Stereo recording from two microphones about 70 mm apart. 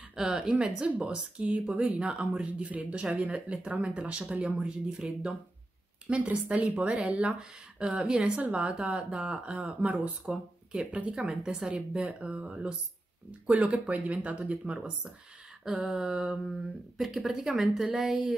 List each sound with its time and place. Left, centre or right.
0.1 s a woman's voice: centre
0.8 s speech: right
1.5 s speech: centre
7.3 s speech: centre
11.1 s speech: centre
14.4 s speech: centre
16.1 s speech: centre
16.9 s speech: centre